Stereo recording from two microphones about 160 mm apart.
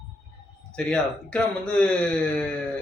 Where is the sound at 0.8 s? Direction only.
5° left (ahead or behind).